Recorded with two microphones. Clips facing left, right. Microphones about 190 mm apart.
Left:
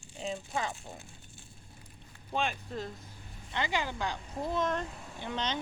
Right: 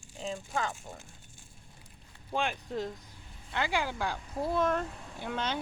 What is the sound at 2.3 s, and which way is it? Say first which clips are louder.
Speech: right 1 dB; 15° right (ahead or behind).